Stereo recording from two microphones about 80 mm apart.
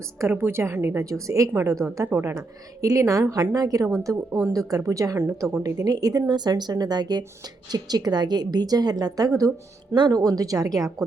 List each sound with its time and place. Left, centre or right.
0.2 s a woman's voice: right
9.9 s a woman's voice: right